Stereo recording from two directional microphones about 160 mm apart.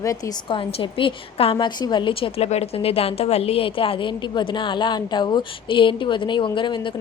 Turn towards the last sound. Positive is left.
turn(degrees=30)  # may be behind; listen again after turning